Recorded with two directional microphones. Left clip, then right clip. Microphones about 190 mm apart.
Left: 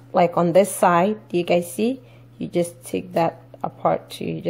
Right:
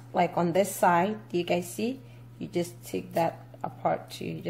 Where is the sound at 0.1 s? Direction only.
35° left (ahead or behind).